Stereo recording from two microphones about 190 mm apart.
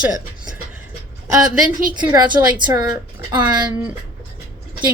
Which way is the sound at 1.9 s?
20° right (ahead or behind).